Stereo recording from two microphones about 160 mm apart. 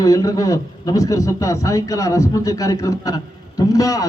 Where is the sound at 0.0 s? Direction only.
20° left (ahead or behind).